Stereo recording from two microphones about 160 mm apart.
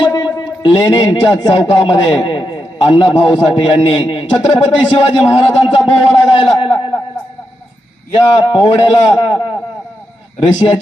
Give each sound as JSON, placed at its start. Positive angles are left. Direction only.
{"t": 0.0, "sound": "a man's voice", "side_deg": 25}
{"t": 8.1, "sound": "a man's voice", "side_deg": 30}